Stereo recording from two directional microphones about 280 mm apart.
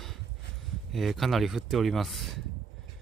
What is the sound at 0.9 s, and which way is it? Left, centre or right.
Speech, centre.